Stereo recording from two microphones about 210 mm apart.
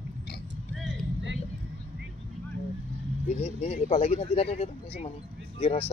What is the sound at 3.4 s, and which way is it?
Speech, 30° left (ahead or behind).